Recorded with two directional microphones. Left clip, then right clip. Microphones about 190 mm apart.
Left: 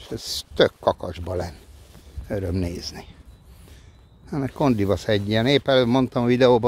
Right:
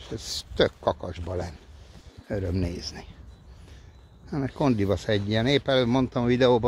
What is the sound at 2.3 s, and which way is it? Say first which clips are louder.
Speech: left 3 dB; 20° left (ahead or behind).